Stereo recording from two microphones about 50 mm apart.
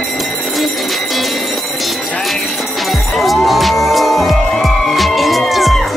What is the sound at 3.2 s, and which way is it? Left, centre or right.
Music, centre.